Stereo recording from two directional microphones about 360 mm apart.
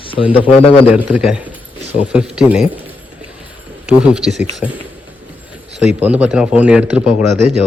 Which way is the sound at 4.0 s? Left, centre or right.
Centre.